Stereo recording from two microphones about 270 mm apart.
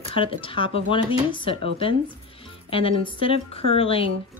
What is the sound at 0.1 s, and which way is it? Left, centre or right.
Speech, centre.